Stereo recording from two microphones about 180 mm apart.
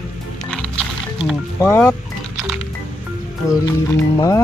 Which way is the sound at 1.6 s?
15° left (ahead or behind).